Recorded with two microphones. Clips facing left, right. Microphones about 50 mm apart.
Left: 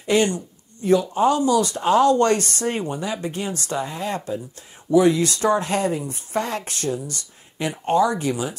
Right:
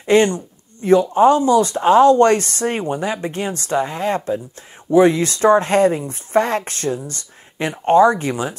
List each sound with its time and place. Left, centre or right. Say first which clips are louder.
0.0 s speech: right 5 dB; right